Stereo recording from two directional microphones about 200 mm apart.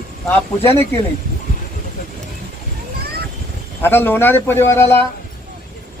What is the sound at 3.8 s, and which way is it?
Speech, 10° left (ahead or behind).